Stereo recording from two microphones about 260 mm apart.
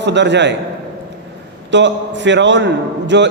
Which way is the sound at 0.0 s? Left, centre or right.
Right.